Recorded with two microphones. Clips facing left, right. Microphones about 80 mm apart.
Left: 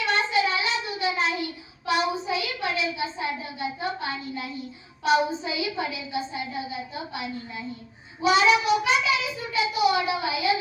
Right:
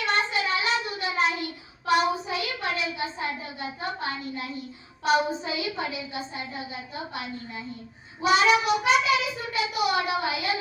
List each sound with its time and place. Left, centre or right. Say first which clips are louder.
0.0 s child singing: left 2 dB; right
5.0 s a child's voice: left 1 dB; right
8.2 s child singing: left 1 dB; right